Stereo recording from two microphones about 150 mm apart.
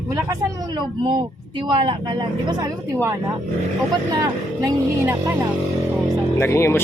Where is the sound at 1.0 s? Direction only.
30° right (ahead or behind).